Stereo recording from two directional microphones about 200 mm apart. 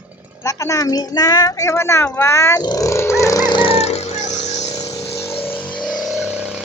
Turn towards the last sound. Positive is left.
turn(degrees=-5)  # may be behind; listen again after turning